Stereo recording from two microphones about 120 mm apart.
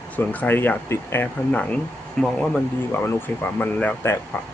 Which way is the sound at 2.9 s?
20° left (ahead or behind).